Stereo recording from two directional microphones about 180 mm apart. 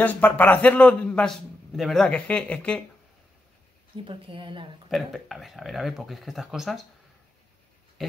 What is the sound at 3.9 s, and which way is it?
Speech, 30° right (ahead or behind).